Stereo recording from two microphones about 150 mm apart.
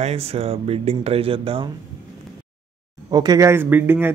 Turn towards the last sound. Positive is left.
turn(degrees=-15)  # may be behind; listen again after turning